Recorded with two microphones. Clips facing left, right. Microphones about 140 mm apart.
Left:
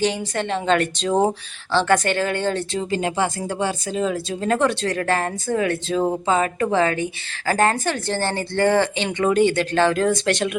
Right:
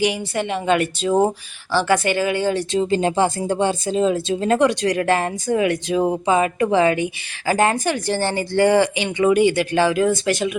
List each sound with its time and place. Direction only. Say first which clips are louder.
0.0 s speech: right 1 dB; 10° right (ahead or behind)
2.8 s speech: right 4 dB; 30° right (ahead or behind); by 10.5 s 5° right (ahead or behind)